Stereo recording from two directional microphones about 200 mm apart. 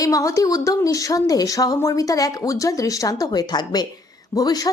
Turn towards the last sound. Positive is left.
turn(degrees=20)  # may be behind; listen again after turning